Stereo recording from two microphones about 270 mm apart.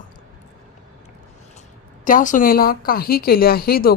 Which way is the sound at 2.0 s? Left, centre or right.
Left.